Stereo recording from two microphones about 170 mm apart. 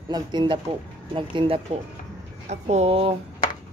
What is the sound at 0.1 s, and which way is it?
Speech, 25° right (ahead or behind).